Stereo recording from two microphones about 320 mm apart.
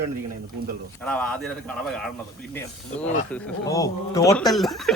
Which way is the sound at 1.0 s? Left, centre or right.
Centre.